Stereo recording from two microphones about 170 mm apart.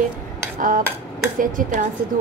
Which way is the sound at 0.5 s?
55° right (ahead or behind).